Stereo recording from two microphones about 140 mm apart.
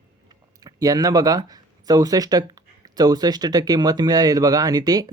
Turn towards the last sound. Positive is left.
turn(degrees=-30)  # may be behind; listen again after turning